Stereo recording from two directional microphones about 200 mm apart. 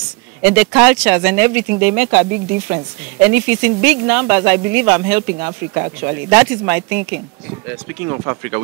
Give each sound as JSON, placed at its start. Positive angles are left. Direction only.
{"t": 0.4, "sound": "speech", "side_deg": -10}
{"t": 8.1, "sound": "speech", "side_deg": -15}